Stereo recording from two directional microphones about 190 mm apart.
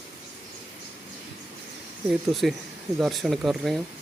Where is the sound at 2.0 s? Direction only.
Centre (ahead or behind).